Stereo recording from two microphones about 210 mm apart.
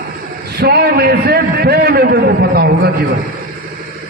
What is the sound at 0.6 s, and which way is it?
A man's voice, 50° right (ahead or behind).